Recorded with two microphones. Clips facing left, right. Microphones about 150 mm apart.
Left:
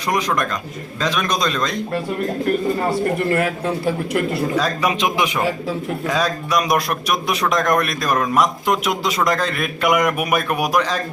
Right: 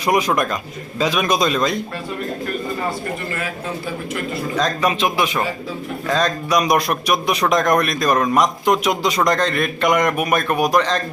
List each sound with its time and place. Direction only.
0.1 s speech: 10° right (ahead or behind)
3.2 s speech: 65° left (ahead or behind)
4.5 s a man's voice: 10° left (ahead or behind)